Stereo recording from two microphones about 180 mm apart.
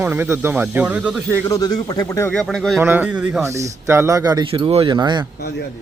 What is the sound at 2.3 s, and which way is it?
Speech, 5° left (ahead or behind).